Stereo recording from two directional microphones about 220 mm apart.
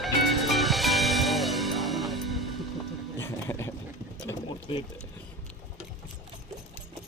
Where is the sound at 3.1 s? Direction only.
10° left (ahead or behind).